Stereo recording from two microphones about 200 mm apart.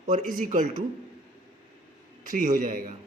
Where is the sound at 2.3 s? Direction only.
40° right (ahead or behind).